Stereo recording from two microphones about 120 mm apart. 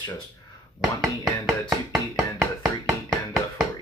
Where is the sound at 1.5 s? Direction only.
5° right (ahead or behind).